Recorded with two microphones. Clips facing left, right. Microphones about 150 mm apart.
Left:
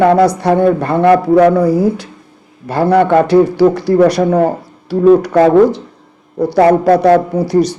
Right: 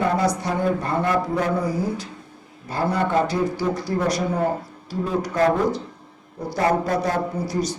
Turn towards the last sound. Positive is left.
turn(degrees=70)  # may be behind; listen again after turning